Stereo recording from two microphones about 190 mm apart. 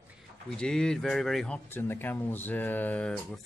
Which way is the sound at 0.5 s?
5° left (ahead or behind).